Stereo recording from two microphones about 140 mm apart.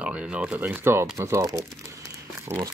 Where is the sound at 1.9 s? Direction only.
20° right (ahead or behind).